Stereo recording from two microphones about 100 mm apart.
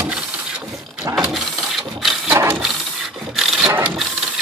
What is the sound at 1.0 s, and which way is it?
Mechanisms, 30° right (ahead or behind).